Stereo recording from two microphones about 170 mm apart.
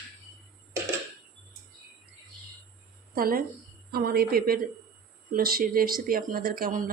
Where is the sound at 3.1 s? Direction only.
60° right (ahead or behind).